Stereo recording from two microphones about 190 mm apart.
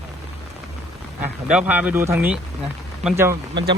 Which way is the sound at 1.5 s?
10° right (ahead or behind).